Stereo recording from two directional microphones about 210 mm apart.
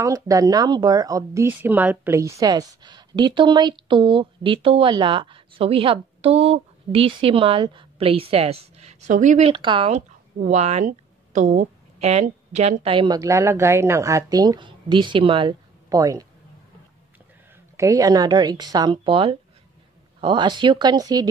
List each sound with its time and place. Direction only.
0.0 s a woman's voice: 15° right (ahead or behind); by 9.5 s 35° right (ahead or behind)
9.5 s a woman's voice: 25° right (ahead or behind)
17.7 s a woman's voice: 15° right (ahead or behind)